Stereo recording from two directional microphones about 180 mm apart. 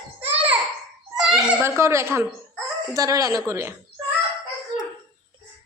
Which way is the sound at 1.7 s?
15° right (ahead or behind).